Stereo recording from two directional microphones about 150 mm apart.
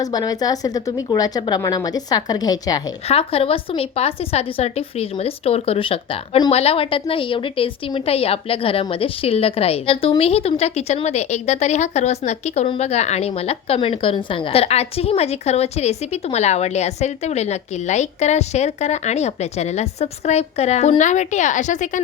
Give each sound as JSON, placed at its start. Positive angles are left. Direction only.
{"t": 0.0, "sound": "a woman's voice", "side_deg": 25}
{"t": 3.1, "sound": "a woman's voice", "side_deg": 40}